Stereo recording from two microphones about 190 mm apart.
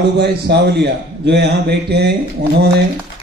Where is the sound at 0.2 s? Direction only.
60° right (ahead or behind).